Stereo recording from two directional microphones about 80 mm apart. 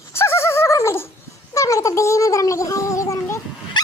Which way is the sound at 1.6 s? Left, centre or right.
Left.